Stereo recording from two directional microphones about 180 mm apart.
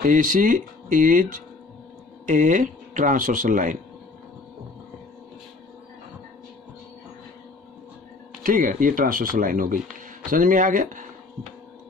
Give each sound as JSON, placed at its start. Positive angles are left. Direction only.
{"t": 0.0, "sound": "speech", "side_deg": -50}
{"t": 8.5, "sound": "speech", "side_deg": -50}